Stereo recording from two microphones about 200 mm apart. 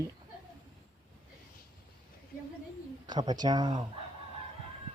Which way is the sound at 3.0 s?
20° right (ahead or behind).